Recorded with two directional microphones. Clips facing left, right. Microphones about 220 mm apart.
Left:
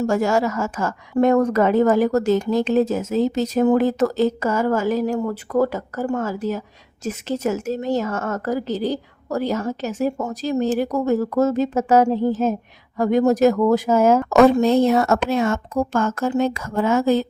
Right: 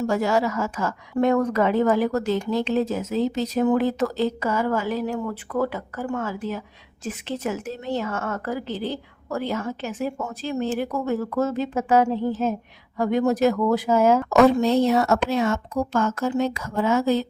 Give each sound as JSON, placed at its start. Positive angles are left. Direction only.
{"t": 0.0, "sound": "a woman's voice", "side_deg": 45}